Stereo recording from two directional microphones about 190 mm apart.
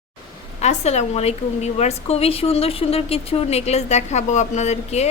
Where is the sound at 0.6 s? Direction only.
35° left (ahead or behind).